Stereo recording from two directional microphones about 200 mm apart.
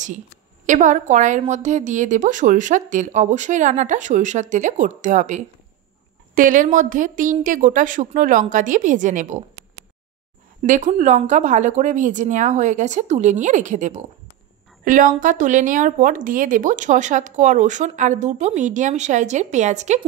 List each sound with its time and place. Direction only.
0.7 s a woman's voice: 35° right (ahead or behind)
10.6 s a woman's voice: 35° right (ahead or behind)